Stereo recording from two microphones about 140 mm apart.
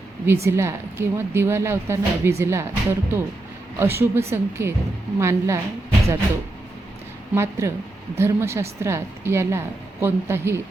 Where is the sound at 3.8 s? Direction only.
15° right (ahead or behind).